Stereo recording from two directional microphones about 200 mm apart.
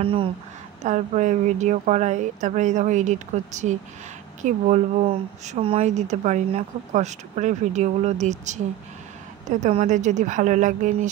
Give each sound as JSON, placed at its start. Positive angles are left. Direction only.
{"t": 0.0, "sound": "speech", "side_deg": -25}
{"t": 9.6, "sound": "speech", "side_deg": -35}